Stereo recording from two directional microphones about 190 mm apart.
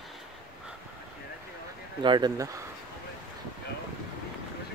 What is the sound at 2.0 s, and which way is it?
Speech, 25° right (ahead or behind).